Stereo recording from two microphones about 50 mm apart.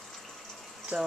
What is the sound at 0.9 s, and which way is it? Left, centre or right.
Speech, right.